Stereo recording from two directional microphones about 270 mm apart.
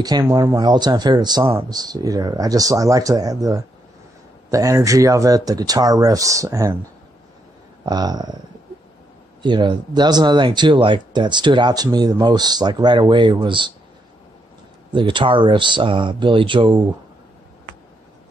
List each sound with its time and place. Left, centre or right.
0.0 s speech: centre
7.8 s speech: centre
9.4 s speech: centre
14.9 s speech: centre